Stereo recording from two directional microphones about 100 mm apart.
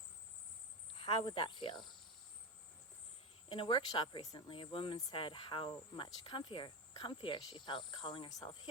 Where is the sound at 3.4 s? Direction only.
55° left (ahead or behind).